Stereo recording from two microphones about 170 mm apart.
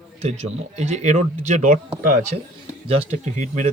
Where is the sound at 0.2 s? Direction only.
40° right (ahead or behind).